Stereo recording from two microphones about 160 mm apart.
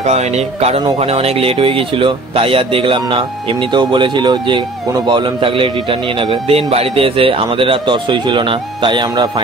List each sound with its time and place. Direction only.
0.0 s speech: 45° right (ahead or behind); by 9.3 s 30° right (ahead or behind)